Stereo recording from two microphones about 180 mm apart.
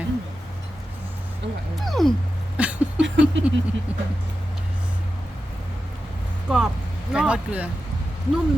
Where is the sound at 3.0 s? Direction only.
90° right.